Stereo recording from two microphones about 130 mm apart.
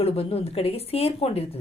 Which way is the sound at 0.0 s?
50° left (ahead or behind).